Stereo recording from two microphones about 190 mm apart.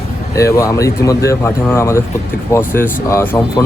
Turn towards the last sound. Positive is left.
turn(degrees=15)  # may be behind; listen again after turning